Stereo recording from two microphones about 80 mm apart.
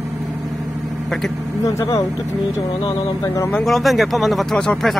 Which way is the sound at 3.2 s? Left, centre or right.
Left.